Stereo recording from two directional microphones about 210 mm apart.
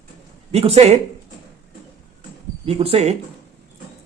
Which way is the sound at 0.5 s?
30° right (ahead or behind).